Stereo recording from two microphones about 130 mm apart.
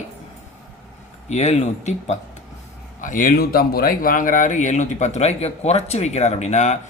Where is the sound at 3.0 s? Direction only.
90° left; by 6.8 s 65° left (ahead or behind).